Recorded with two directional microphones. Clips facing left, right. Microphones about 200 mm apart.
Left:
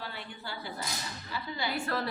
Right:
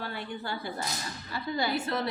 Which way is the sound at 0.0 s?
50° right (ahead or behind).